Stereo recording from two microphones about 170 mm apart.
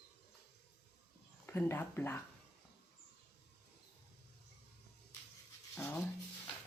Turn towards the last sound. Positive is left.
turn(degrees=15)  # may be behind; listen again after turning